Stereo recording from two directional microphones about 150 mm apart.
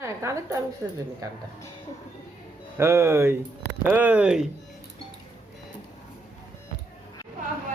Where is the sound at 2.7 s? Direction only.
15° right (ahead or behind).